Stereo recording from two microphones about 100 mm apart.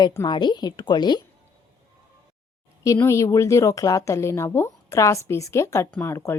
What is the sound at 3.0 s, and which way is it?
A woman's voice, 30° left (ahead or behind).